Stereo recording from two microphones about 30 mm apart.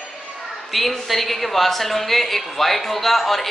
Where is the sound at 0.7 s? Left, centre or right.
Centre.